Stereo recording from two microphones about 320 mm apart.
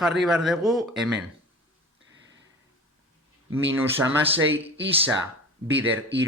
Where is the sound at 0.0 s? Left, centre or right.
Centre.